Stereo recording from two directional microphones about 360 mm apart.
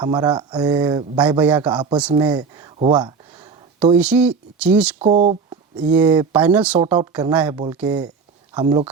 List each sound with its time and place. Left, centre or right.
0.0 s a man's voice: centre
3.9 s speech: centre
5.0 s a man's voice: centre